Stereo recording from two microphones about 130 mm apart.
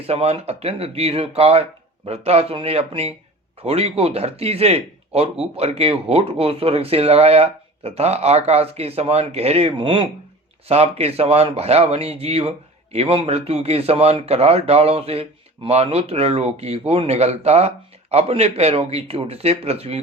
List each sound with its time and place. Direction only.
0.0 s speech: 50° right (ahead or behind)
10.7 s speech: 55° right (ahead or behind)